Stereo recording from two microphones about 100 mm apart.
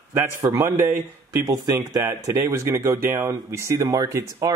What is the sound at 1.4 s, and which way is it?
Speech, 40° right (ahead or behind).